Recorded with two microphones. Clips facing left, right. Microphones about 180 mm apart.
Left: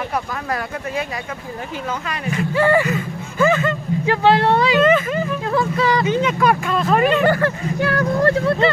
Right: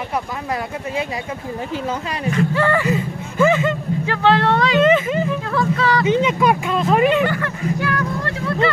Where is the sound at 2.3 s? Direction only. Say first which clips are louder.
Left 1 dB; 10° left (ahead or behind).